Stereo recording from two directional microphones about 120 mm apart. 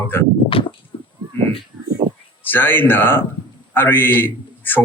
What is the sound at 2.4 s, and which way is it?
A man's voice, 15° left (ahead or behind).